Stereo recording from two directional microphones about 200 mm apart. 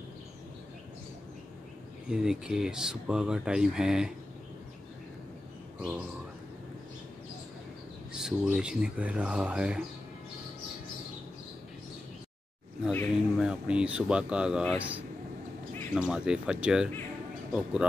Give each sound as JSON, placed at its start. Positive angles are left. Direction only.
{"t": 2.0, "sound": "speech", "side_deg": -5}
{"t": 5.8, "sound": "speech", "side_deg": -5}
{"t": 8.1, "sound": "speech", "side_deg": -5}
{"t": 13.4, "sound": "speech", "side_deg": -5}